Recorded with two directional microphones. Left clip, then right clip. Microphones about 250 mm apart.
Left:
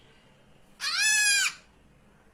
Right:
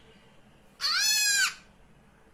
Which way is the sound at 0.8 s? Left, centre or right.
Centre.